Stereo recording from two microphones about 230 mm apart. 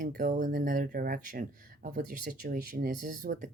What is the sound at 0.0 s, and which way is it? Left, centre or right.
Speech, right.